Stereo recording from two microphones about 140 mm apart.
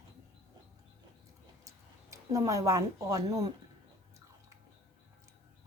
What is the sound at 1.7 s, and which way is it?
Speech, 25° right (ahead or behind).